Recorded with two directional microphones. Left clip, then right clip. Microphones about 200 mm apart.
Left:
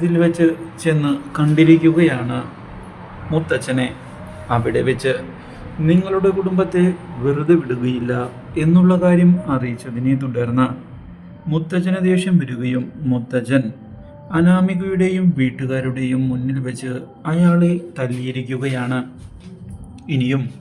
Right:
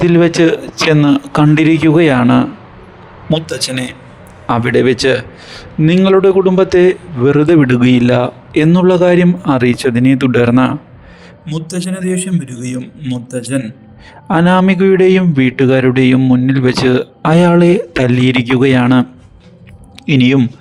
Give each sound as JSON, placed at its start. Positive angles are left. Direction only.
{"t": 0.1, "sound": "a man's voice", "side_deg": -45}
{"t": 4.4, "sound": "a man's voice", "side_deg": -50}
{"t": 11.9, "sound": "a man's voice", "side_deg": 0}
{"t": 14.3, "sound": "a man's voice", "side_deg": -50}
{"t": 20.1, "sound": "a man's voice", "side_deg": -50}